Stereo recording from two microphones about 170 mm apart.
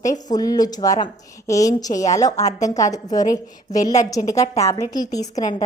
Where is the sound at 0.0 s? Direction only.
20° left (ahead or behind).